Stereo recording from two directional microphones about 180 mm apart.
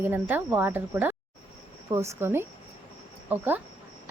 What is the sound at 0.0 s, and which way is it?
A woman's voice, 10° right (ahead or behind).